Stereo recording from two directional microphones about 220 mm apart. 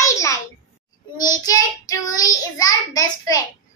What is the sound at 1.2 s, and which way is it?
A child's voice, 15° left (ahead or behind).